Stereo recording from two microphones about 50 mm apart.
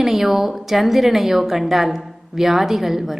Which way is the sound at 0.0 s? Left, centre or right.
Centre.